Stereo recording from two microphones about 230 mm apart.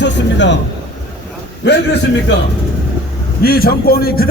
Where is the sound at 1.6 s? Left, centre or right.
Left.